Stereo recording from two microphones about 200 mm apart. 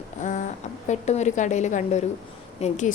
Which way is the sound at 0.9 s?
35° left (ahead or behind).